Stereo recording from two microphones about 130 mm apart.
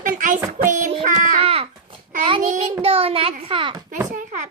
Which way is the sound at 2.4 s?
65° right (ahead or behind).